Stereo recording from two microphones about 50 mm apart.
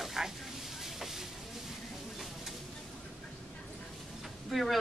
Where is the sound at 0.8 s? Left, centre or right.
Centre.